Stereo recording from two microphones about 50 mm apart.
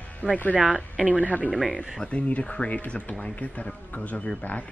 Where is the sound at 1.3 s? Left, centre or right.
Left.